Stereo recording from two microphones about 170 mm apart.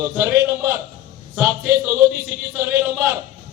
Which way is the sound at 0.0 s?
15° right (ahead or behind).